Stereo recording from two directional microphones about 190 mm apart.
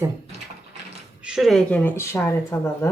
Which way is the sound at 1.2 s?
Centre (ahead or behind).